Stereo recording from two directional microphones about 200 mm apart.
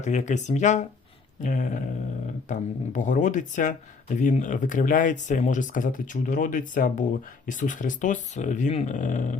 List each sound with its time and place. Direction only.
0.0 s speech: 35° left (ahead or behind)